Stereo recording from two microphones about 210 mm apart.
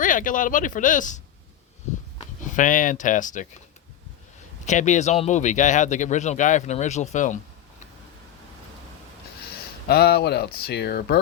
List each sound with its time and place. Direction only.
0.0 s speech: 40° left (ahead or behind)
2.4 s speech: 40° left (ahead or behind)
4.6 s speech: 35° left (ahead or behind)
9.9 s speech: 50° left (ahead or behind)